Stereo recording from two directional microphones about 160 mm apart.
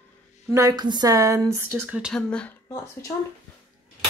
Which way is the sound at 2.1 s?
5° left (ahead or behind).